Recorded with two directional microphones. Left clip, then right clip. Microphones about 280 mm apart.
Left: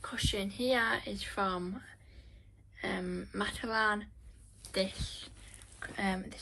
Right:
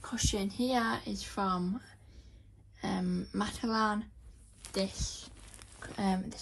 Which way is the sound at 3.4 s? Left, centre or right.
Right.